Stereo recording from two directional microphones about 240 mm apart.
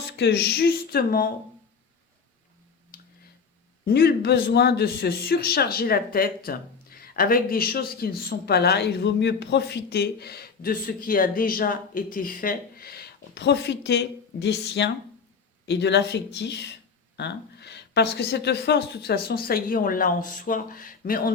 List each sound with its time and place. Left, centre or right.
0.2 s a man's voice: left
2.9 s tick-tock: left
3.8 s a man's voice: left